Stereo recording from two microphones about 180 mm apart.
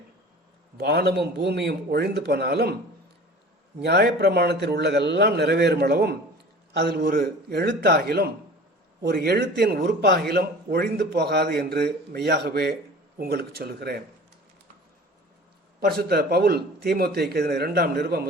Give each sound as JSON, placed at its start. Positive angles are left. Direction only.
{"t": 0.8, "sound": "speech", "side_deg": -65}
{"t": 3.8, "sound": "speech", "side_deg": -65}
{"t": 15.8, "sound": "speech", "side_deg": -60}